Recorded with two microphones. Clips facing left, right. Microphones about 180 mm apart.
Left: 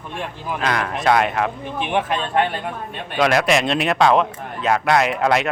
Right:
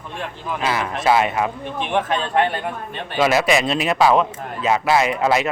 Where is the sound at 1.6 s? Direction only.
10° left (ahead or behind).